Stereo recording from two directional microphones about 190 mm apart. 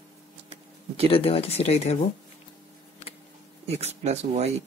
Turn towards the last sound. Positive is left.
turn(degrees=-35)  # may be behind; listen again after turning